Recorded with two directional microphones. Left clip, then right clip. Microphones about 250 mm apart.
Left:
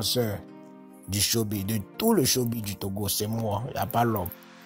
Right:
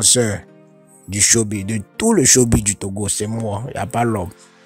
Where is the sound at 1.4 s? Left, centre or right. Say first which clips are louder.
Right 7 dB; right.